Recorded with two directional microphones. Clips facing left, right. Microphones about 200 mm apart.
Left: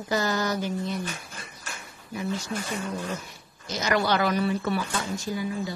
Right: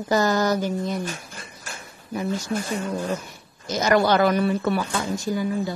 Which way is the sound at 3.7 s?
45° right (ahead or behind).